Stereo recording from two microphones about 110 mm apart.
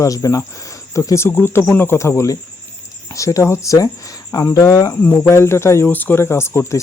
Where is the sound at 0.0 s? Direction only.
30° left (ahead or behind).